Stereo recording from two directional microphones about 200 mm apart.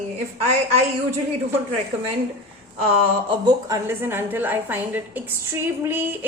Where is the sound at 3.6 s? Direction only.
15° right (ahead or behind).